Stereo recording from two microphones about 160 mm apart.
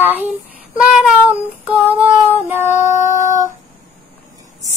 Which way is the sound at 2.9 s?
50° left (ahead or behind).